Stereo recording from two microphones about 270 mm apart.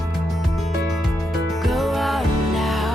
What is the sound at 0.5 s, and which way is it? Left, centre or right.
Music, centre.